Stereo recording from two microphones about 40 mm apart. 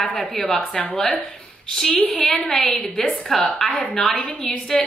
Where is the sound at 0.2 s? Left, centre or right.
Centre.